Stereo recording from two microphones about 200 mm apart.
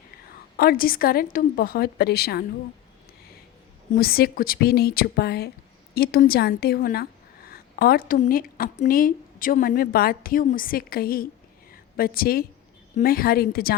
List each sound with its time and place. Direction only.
0.5 s a woman's voice: 45° left (ahead or behind)
3.9 s a woman's voice: 50° left (ahead or behind)